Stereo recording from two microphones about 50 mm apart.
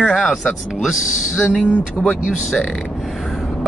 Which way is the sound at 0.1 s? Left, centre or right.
Centre.